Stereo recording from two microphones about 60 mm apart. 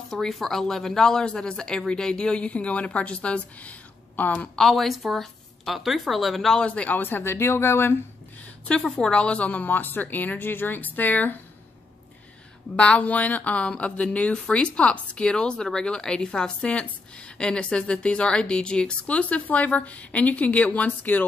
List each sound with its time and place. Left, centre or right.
0.1 s speech: centre; by 4.5 s left
4.6 s a woman's voice: centre
6.6 s speech: left
7.0 s speech: left
8.8 s speech: centre; by 11.3 s left
12.7 s speech: left